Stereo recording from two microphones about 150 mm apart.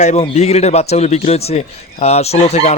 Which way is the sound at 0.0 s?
50° left (ahead or behind).